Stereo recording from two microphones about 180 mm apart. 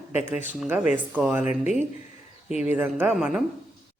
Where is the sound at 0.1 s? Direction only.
10° right (ahead or behind).